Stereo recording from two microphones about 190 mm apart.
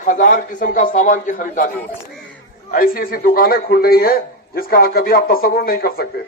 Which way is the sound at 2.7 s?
50° left (ahead or behind).